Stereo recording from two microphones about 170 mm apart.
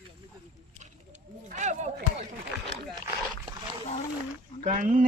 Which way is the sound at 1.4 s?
45° right (ahead or behind).